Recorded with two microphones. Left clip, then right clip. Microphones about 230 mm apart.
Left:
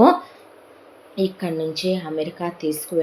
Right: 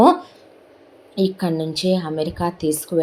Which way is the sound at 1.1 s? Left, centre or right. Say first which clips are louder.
Right 2 dB; right.